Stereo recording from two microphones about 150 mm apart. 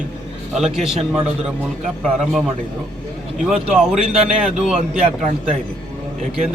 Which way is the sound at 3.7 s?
5° right (ahead or behind).